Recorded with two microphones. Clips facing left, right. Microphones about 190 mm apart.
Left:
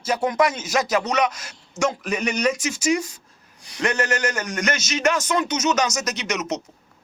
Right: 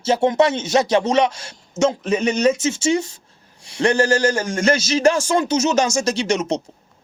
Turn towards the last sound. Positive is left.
turn(degrees=-30)  # may be behind; listen again after turning